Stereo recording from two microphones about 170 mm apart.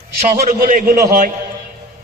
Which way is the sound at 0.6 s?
55° right (ahead or behind).